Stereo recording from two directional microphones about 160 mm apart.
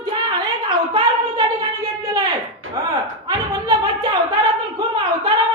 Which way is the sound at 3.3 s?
25° right (ahead or behind).